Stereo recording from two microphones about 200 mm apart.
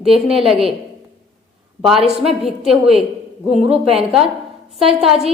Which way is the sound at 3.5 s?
30° right (ahead or behind).